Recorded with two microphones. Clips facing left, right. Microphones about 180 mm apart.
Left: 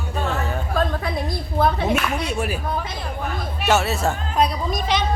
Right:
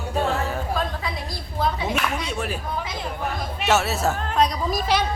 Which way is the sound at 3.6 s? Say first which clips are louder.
Left 1 dB; centre (ahead or behind).